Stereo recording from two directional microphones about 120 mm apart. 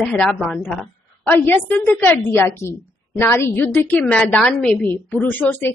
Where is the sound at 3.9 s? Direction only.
10° left (ahead or behind).